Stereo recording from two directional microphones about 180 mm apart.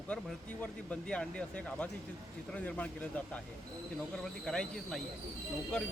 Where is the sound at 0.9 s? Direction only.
5° left (ahead or behind).